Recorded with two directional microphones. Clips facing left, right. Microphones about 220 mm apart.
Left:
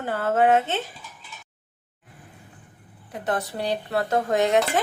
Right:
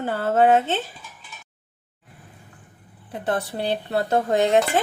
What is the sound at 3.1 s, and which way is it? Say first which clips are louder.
Speech: right 2 dB; 30° right (ahead or behind).